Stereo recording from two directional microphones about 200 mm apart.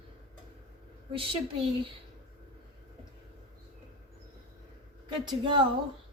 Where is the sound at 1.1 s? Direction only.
25° right (ahead or behind).